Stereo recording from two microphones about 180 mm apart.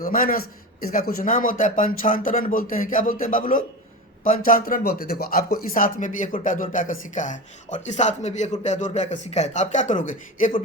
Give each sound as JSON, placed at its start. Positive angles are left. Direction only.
{"t": 0.0, "sound": "a man's voice", "side_deg": 50}